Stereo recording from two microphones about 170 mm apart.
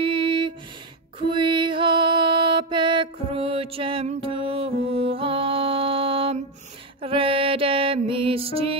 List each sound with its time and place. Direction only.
0.0 s a sound: 30° right (ahead or behind)
1.2 s mantra: 30° right (ahead or behind)
4.8 s music: 35° right (ahead or behind)